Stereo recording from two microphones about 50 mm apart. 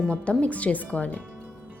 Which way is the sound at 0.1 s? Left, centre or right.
Left.